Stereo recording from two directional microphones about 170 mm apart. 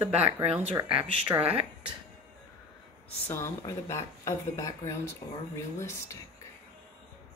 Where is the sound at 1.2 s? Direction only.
10° right (ahead or behind).